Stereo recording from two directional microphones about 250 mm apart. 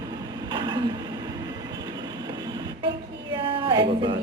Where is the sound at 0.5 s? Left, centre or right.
Centre.